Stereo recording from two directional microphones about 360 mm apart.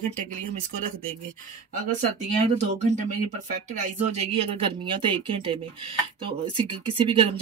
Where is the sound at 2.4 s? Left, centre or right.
Centre.